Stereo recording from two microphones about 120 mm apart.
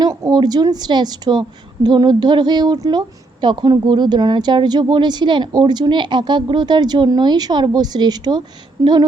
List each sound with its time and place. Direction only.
0.0 s a woman's voice: 30° right (ahead or behind)